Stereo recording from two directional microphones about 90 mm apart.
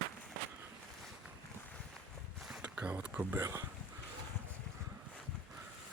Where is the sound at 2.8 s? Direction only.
15° right (ahead or behind).